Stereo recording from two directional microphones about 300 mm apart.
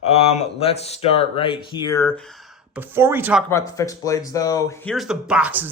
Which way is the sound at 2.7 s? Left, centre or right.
Centre.